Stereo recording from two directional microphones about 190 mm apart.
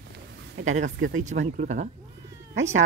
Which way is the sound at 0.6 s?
40° right (ahead or behind).